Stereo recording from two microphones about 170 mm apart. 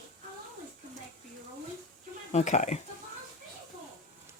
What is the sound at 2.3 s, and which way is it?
Speech, 40° left (ahead or behind).